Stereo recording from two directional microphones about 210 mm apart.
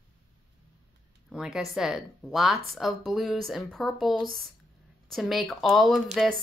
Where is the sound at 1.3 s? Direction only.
5° right (ahead or behind).